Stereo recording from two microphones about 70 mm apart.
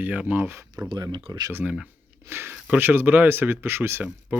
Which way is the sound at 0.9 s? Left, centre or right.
Right.